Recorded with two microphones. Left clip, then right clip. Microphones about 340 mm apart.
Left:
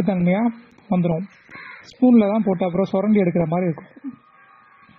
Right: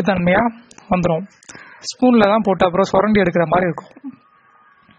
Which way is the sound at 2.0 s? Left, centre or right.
Right.